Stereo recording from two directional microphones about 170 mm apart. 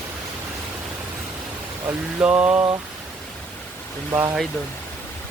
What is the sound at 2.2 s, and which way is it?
Mantra, 10° right (ahead or behind).